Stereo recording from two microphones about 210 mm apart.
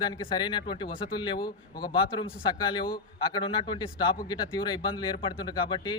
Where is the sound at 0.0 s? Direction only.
20° left (ahead or behind).